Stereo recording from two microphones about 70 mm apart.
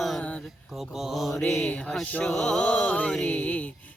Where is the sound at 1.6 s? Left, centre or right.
Centre.